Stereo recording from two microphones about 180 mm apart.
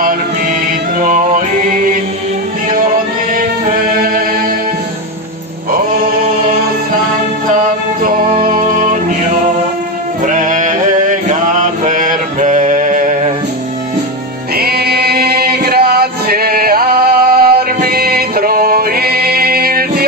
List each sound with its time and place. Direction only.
0.9 s music: 45° right (ahead or behind)
4.0 s music: 50° right (ahead or behind)
5.7 s chant: 55° right (ahead or behind)
8.0 s music: 50° right (ahead or behind)
10.2 s mantra: 45° right (ahead or behind)
14.5 s male singing: 60° right (ahead or behind)